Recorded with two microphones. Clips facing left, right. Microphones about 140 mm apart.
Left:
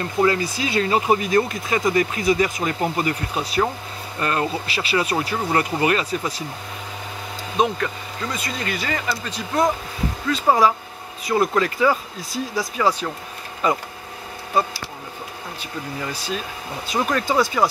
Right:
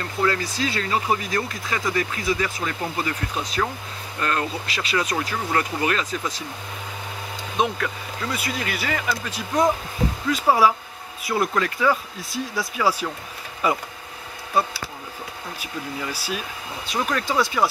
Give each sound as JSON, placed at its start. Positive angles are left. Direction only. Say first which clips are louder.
{"t": 0.2, "sound": "speech", "louder": "left 3 dB", "side_deg": 15}
{"t": 7.6, "sound": "speech", "louder": "left 3 dB", "side_deg": -5}
{"t": 15.6, "sound": "speech", "louder": "left 1 dB", "side_deg": -10}